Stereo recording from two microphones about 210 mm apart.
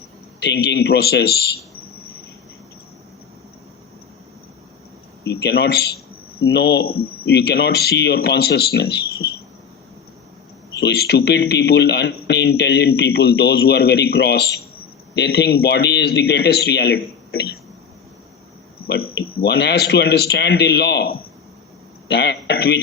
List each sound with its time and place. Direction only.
0.3 s speech: 50° left (ahead or behind)
5.2 s speech: 50° left (ahead or behind)
10.8 s speech: 50° left (ahead or behind)
18.9 s speech: 50° left (ahead or behind)